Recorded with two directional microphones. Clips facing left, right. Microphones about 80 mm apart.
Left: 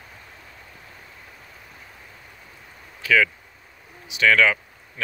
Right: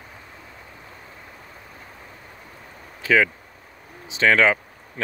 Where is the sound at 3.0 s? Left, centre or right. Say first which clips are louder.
Right 1 dB; right.